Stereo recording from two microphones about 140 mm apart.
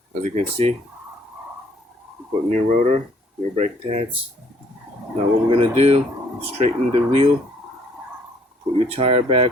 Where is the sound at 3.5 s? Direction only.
50° right (ahead or behind).